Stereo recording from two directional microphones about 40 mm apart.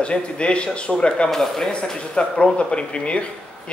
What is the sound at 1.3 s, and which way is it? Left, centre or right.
Speech, centre.